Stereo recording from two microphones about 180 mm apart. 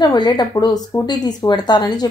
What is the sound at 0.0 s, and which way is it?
Speech, 25° left (ahead or behind).